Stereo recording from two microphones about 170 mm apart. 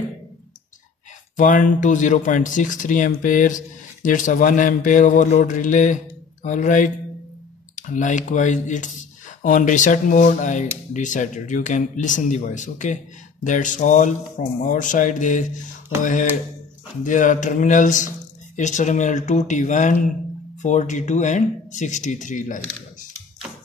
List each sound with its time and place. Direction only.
1.3 s speech: 50° left (ahead or behind)